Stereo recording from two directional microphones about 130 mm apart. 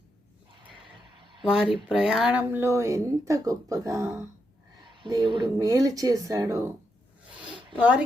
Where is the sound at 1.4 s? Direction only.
5° right (ahead or behind); by 4.1 s 25° right (ahead or behind).